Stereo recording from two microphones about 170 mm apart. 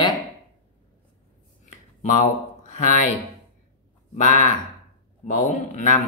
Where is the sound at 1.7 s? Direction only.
50° left (ahead or behind).